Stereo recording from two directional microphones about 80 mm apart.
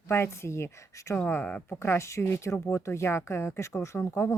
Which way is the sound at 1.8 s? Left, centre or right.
Left.